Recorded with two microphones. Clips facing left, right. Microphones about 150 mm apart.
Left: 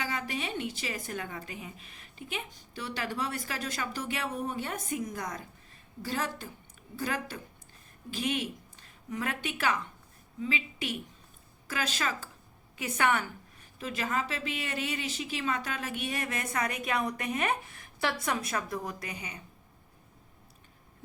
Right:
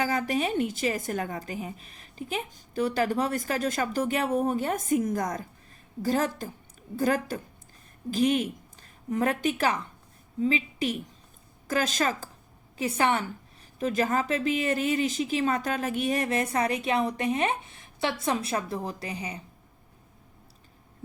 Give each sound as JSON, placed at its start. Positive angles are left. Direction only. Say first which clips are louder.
{"t": 0.0, "sound": "a woman's voice", "louder": "right 8 dB", "side_deg": -40}
{"t": 13.7, "sound": "a woman's voice", "louder": "right 7 dB", "side_deg": -40}